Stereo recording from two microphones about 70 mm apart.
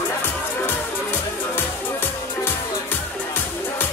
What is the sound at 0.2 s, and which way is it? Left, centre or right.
Music, left.